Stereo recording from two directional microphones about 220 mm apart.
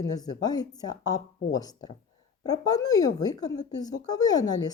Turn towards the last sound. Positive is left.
turn(degrees=15)  # may be behind; listen again after turning